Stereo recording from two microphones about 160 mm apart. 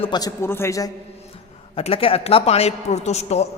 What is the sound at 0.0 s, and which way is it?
Speech, 25° left (ahead or behind).